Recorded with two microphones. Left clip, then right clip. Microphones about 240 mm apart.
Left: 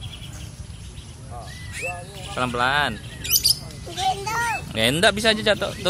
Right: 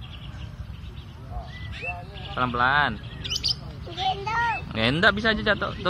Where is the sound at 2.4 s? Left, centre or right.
Left.